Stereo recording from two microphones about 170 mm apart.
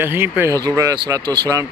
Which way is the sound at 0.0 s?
10° right (ahead or behind).